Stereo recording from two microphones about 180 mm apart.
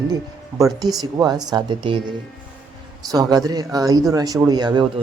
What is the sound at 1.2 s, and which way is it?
A man's voice, 20° right (ahead or behind).